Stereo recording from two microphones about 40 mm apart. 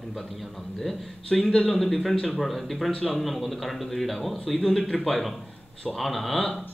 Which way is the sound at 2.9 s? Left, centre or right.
Centre.